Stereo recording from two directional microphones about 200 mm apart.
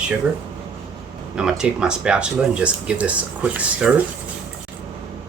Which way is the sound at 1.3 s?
5° right (ahead or behind).